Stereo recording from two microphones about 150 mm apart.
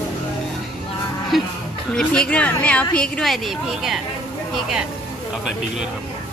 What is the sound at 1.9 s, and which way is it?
A woman's voice, 5° left (ahead or behind).